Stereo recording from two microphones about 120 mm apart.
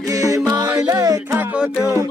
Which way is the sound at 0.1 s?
30° right (ahead or behind).